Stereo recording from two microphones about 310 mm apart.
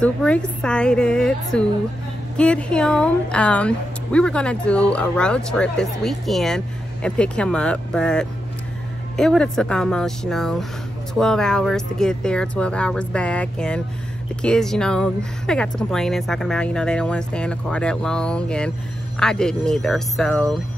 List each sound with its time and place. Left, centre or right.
0.0 s speech: centre